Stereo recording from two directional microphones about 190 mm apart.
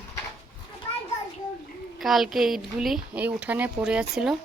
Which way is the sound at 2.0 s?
Centre (ahead or behind).